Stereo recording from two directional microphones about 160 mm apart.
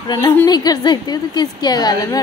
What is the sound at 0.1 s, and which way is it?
A woman's voice, 15° left (ahead or behind).